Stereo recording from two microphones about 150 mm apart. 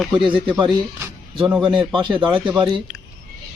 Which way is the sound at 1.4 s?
5° right (ahead or behind).